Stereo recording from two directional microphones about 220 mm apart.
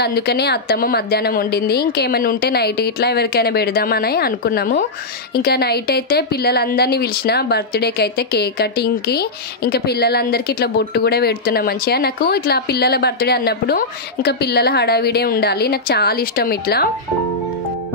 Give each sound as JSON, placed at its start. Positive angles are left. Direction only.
{"t": 0.0, "sound": "a woman's voice", "side_deg": 50}